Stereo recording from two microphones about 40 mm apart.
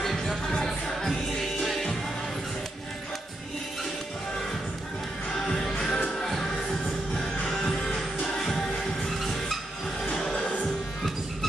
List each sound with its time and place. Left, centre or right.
0.5 s music: centre
5.3 s music: centre
7.5 s music: centre
9.2 s vehicle: centre